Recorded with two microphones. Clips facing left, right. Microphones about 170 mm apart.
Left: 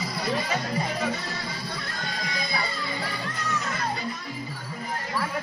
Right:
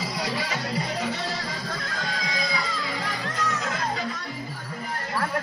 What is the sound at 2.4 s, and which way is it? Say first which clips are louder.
Music: even; 90° right.